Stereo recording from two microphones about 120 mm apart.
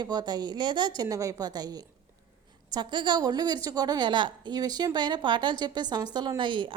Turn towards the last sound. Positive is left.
turn(degrees=-40)  # may be behind; listen again after turning